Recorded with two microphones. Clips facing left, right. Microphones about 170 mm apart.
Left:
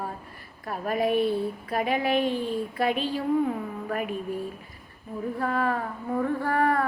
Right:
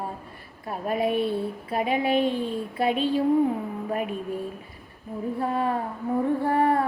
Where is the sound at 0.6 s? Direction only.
25° right (ahead or behind).